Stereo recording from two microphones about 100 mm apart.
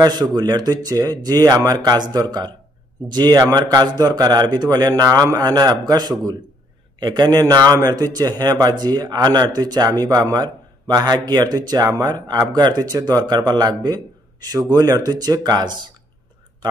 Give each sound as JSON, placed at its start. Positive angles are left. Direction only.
{"t": 0.0, "sound": "a man's voice", "side_deg": -40}